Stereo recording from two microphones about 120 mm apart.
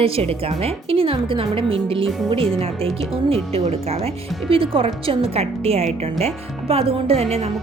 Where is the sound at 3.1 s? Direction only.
55° right (ahead or behind).